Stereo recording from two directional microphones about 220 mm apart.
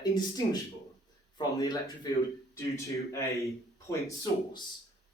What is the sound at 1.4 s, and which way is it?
Speech, 20° left (ahead or behind).